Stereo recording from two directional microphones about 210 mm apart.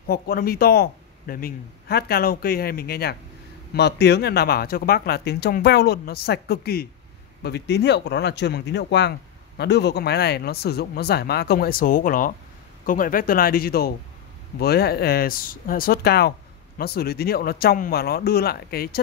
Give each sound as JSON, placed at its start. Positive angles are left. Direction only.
{"t": 0.0, "sound": "speech", "side_deg": 45}